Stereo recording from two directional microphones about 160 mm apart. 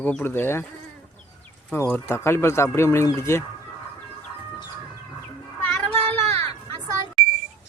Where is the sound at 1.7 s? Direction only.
10° left (ahead or behind).